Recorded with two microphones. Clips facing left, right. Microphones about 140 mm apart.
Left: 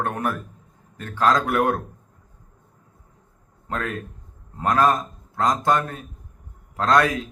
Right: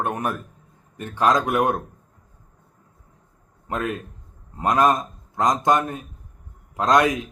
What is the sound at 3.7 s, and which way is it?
A man's voice, 15° right (ahead or behind).